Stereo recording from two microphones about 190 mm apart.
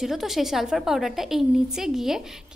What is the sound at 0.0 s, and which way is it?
A woman's voice, centre (ahead or behind).